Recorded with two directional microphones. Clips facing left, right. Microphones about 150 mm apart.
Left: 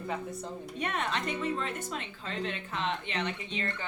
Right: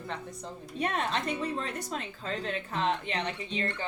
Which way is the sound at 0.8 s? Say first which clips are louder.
Right 3 dB; 35° right (ahead or behind).